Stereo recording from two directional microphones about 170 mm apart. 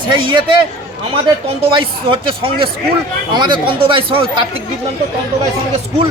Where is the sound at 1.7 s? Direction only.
30° right (ahead or behind).